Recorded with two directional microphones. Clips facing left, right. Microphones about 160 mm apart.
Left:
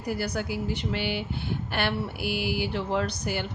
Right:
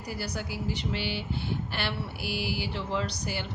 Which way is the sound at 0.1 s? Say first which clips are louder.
Left 6 dB; 55° left (ahead or behind).